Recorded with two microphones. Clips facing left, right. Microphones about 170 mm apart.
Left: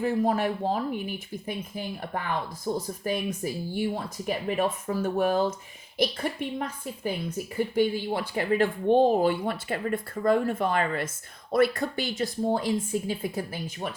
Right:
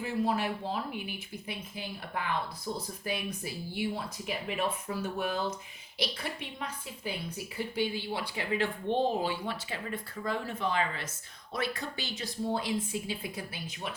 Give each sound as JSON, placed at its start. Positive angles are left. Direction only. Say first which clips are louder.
{"t": 0.0, "sound": "a woman's voice", "louder": "left 6 dB", "side_deg": 50}